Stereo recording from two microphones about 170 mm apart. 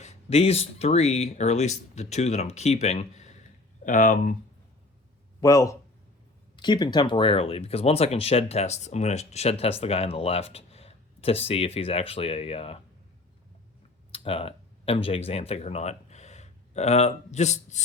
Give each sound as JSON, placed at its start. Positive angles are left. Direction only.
{"t": 0.0, "sound": "speech", "side_deg": 40}
{"t": 5.4, "sound": "a man's voice", "side_deg": 20}
{"t": 14.1, "sound": "speech", "side_deg": 35}